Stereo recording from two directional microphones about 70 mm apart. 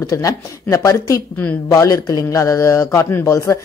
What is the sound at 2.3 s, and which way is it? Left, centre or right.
Speech, left.